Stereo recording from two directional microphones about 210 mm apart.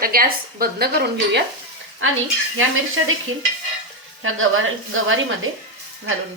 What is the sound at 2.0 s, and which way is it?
Speech, 75° right (ahead or behind).